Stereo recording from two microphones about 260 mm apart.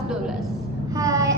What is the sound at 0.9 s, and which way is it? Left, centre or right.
Child singing, centre.